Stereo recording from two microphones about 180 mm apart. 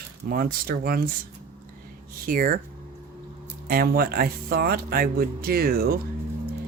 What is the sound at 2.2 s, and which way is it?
Speech, 50° right (ahead or behind).